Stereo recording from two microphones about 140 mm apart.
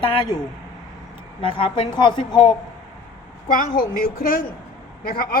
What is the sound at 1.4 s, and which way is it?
Speech, 35° left (ahead or behind).